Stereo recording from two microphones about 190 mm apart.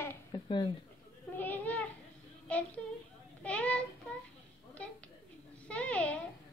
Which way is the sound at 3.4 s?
5° left (ahead or behind).